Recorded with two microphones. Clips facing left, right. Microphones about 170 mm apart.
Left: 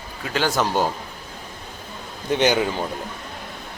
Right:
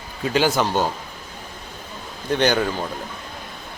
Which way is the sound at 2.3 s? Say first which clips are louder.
Even; 15° left (ahead or behind).